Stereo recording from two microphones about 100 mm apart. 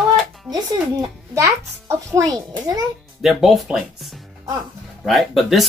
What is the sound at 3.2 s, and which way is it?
Speech, centre (ahead or behind).